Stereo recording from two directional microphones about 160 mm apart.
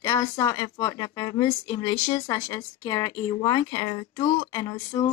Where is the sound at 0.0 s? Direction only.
20° left (ahead or behind).